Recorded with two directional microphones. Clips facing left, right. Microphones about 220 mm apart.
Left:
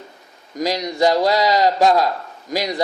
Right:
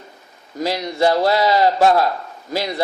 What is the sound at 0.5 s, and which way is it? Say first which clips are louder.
Speech: left 1 dB; 15° left (ahead or behind).